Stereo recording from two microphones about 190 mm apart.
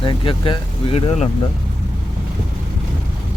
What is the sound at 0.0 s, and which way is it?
Speech, 25° left (ahead or behind).